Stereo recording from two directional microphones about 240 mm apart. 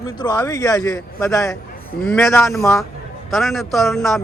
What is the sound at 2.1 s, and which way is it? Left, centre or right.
A man's voice, centre.